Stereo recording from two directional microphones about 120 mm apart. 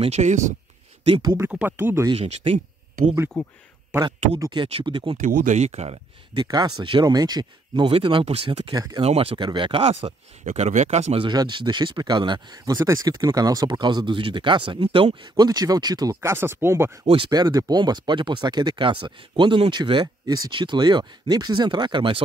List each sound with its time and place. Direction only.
0.0 s speech: 70° right (ahead or behind); by 0.6 s 90° right
1.0 s speech: 45° right (ahead or behind)
1.5 s speech: 15° right (ahead or behind)
2.1 s speech: 55° right (ahead or behind)
3.3 s speech: 5° left (ahead or behind)
4.4 s speech: 40° right (ahead or behind)
5.1 s speech: 90° right; by 5.9 s 60° right (ahead or behind)
6.3 s speech: 35° right (ahead or behind)
8.7 s speech: 35° right (ahead or behind)
9.0 s speech: 55° right (ahead or behind)
11.1 s speech: 40° right (ahead or behind); by 17.0 s 20° right (ahead or behind)
17.0 s speech: 50° right (ahead or behind)
17.3 s speech: 35° right (ahead or behind)